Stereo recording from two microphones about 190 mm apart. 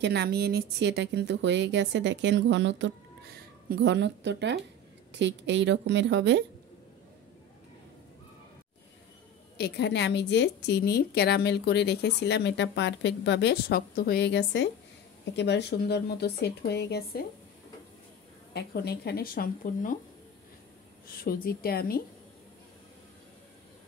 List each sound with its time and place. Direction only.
0.0 s speech: 60° right (ahead or behind)
9.6 s a woman's voice: 65° left (ahead or behind)
18.5 s speech: 55° left (ahead or behind)
21.2 s speech: 50° left (ahead or behind)